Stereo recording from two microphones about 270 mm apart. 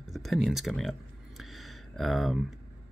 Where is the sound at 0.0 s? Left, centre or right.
Centre.